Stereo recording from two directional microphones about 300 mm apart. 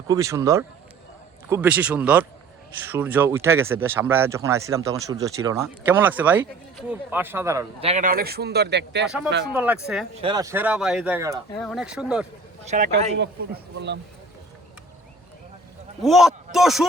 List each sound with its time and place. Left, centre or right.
0.1 s speech: centre; by 9.0 s right
9.0 s speech: centre
10.2 s speech: centre
12.6 s speech: right
16.0 s a man's voice: centre